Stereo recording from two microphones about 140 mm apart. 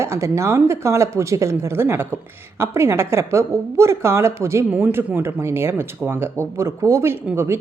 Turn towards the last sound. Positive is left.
turn(degrees=-15)  # may be behind; listen again after turning